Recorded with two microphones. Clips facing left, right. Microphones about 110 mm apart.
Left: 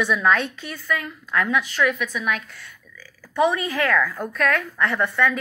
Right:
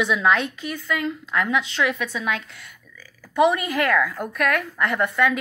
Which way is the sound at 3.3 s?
15° right (ahead or behind).